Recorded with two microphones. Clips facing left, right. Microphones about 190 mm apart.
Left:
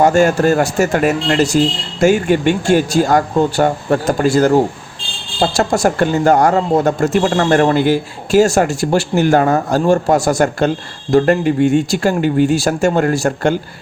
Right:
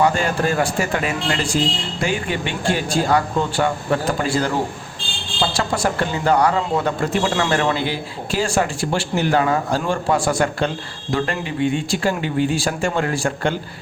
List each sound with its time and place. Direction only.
0.0 s speech: 45° left (ahead or behind)